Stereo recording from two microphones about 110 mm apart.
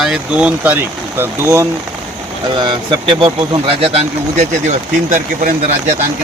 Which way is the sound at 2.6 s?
45° right (ahead or behind).